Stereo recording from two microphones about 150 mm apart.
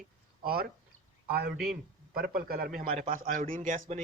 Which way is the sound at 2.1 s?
85° right.